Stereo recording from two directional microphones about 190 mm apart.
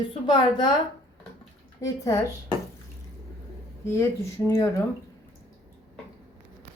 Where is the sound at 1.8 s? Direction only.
20° left (ahead or behind).